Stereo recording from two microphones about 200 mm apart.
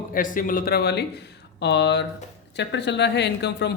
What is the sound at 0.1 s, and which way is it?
Speech, 45° left (ahead or behind).